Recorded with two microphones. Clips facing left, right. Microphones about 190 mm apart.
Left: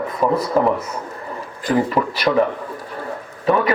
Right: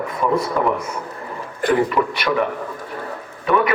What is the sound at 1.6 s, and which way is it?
Speech, 60° right (ahead or behind).